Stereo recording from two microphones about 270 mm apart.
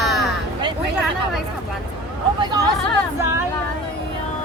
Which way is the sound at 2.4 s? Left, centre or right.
Centre.